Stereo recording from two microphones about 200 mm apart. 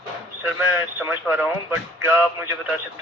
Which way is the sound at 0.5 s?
10° right (ahead or behind).